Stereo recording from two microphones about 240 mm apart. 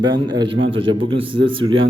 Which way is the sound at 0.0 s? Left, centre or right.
Centre.